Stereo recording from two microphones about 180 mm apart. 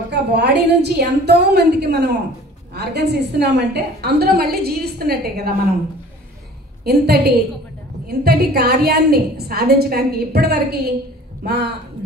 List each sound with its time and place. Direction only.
0.1 s a woman's voice: 65° right (ahead or behind)
6.8 s a woman's voice: 65° right (ahead or behind)